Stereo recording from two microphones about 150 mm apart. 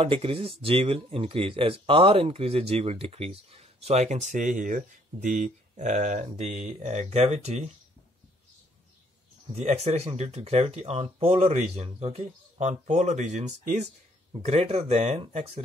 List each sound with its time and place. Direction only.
0.0 s speech: 40° right (ahead or behind)
9.5 s speech: 45° right (ahead or behind)